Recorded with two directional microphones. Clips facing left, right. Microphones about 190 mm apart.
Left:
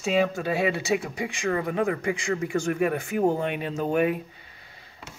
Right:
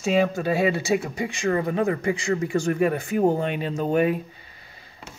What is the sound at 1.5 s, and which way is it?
Speech, 25° right (ahead or behind).